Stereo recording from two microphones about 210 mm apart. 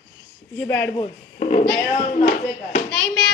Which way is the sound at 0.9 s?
30° left (ahead or behind).